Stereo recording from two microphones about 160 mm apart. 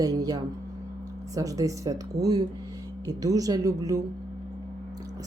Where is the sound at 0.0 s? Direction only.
20° right (ahead or behind).